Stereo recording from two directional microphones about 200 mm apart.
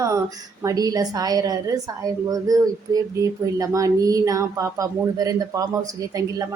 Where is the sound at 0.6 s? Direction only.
20° right (ahead or behind).